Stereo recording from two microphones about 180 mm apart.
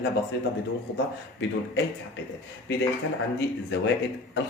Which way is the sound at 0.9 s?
90° left.